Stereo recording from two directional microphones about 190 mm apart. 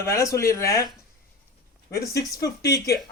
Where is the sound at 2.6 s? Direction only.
15° left (ahead or behind).